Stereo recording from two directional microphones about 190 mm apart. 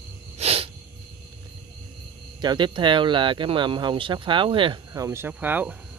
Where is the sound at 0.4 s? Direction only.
30° right (ahead or behind).